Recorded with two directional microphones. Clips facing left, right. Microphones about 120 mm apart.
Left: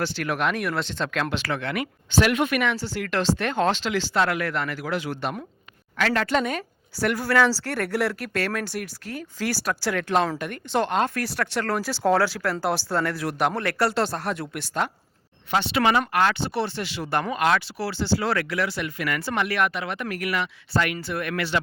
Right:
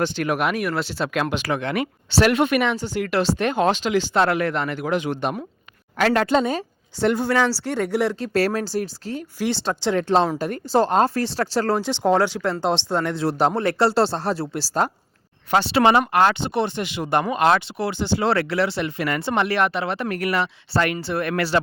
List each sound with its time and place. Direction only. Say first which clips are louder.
0.0 s speech: right 4 dB; 15° right (ahead or behind)
4.2 s speech: right 2 dB; 25° right (ahead or behind)
6.0 s speech: right 5 dB; 40° right (ahead or behind); by 8.3 s 15° right (ahead or behind)
8.3 s speech: right 6 dB; 35° right (ahead or behind)